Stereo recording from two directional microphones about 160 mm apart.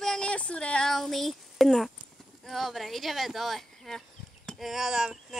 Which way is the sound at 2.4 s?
Centre (ahead or behind).